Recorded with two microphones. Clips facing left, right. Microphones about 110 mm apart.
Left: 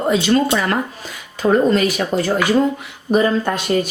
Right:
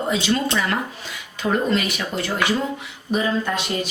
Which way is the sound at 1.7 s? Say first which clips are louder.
Left 6 dB; 40° left (ahead or behind).